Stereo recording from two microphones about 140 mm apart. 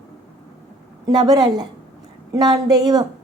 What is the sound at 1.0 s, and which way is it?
A woman's voice, 30° right (ahead or behind).